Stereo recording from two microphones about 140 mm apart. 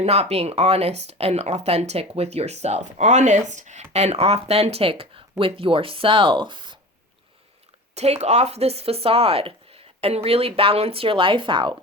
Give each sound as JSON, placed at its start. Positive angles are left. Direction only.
{"t": 0.0, "sound": "a woman's voice", "side_deg": -50}
{"t": 7.9, "sound": "a woman's voice", "side_deg": -50}